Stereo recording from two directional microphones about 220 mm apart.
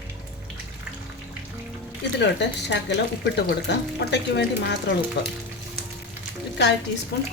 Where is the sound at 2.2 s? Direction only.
55° left (ahead or behind).